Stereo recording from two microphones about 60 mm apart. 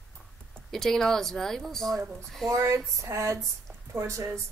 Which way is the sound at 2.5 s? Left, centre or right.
Right.